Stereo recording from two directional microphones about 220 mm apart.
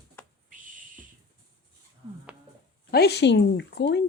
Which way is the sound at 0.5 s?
35° right (ahead or behind).